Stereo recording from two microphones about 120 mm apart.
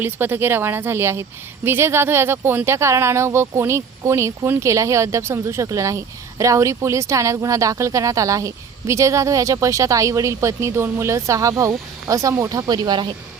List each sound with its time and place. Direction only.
0.0 s speech: 15° right (ahead or behind); by 13.1 s 35° right (ahead or behind)